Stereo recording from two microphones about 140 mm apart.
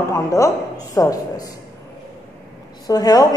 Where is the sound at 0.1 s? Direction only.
20° left (ahead or behind).